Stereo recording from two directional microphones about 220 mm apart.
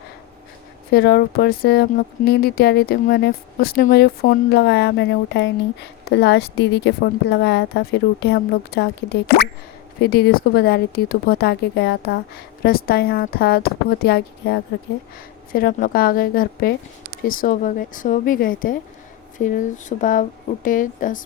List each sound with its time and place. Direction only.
0.9 s a woman's voice: 45° left (ahead or behind)